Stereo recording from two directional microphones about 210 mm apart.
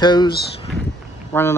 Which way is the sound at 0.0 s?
20° left (ahead or behind).